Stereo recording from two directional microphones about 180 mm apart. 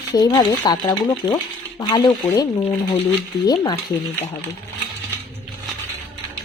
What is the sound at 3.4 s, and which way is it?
Speech, 20° left (ahead or behind).